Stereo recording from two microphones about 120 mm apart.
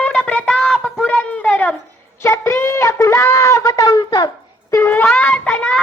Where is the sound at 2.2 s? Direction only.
20° left (ahead or behind); by 4.3 s 35° left (ahead or behind).